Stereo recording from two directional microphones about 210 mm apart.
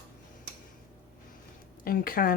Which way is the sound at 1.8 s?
45° left (ahead or behind).